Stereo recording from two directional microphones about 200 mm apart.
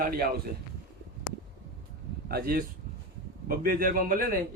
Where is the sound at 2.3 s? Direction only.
50° right (ahead or behind).